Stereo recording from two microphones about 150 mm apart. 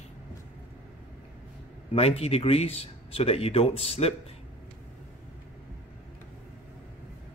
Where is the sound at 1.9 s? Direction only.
40° left (ahead or behind).